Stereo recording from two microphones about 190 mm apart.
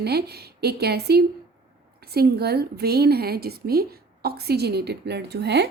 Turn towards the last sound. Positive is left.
turn(degrees=-60)  # may be behind; listen again after turning